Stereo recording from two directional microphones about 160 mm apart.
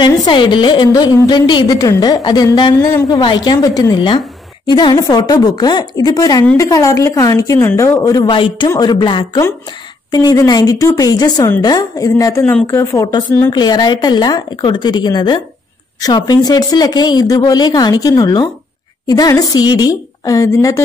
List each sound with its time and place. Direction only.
0.0 s a woman's voice: 30° left (ahead or behind)